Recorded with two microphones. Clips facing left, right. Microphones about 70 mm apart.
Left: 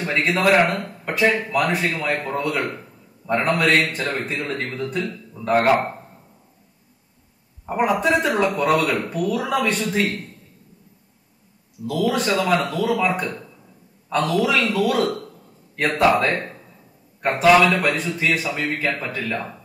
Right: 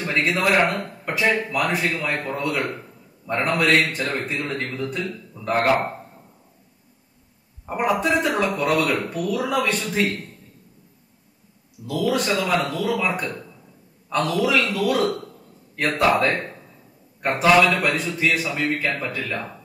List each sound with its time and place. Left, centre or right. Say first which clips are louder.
0.0 s a man's voice: left 2 dB; centre
7.6 s a man's voice: left 2 dB; centre
11.9 s a man's voice: left 1 dB; centre